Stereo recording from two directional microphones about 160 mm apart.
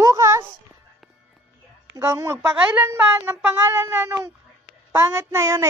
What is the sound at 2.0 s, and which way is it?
A woman's voice, 20° right (ahead or behind).